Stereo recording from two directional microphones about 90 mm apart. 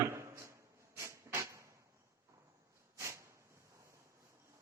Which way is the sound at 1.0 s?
30° right (ahead or behind).